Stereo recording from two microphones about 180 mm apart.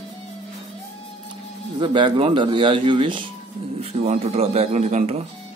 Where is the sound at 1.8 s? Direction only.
25° right (ahead or behind).